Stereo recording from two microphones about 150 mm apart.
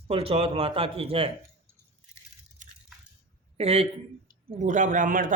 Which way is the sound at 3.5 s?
45° right (ahead or behind).